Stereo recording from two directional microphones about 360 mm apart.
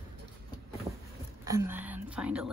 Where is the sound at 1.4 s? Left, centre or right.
Centre.